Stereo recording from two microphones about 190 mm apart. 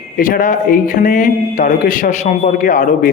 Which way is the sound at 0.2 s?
45° left (ahead or behind).